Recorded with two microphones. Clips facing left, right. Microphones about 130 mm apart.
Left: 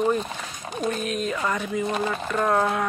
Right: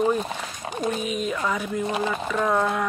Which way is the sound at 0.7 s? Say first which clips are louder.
Even; 5° right (ahead or behind).